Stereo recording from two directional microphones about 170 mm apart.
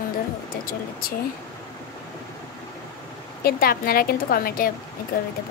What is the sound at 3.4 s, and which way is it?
A woman's voice, 60° left (ahead or behind).